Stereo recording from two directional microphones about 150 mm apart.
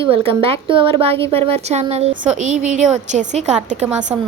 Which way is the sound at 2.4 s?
55° right (ahead or behind).